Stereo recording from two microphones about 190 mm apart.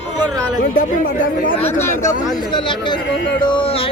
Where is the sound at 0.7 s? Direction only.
50° left (ahead or behind).